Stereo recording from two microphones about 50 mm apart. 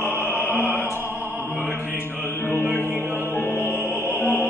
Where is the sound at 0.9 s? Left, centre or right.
Right.